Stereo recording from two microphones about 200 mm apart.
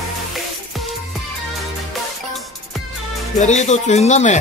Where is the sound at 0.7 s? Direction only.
Centre (ahead or behind).